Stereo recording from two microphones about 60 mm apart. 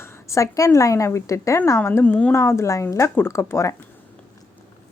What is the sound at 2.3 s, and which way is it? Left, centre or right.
A woman's voice, left.